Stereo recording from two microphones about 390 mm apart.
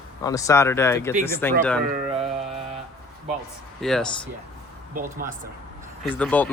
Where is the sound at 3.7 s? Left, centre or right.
Centre.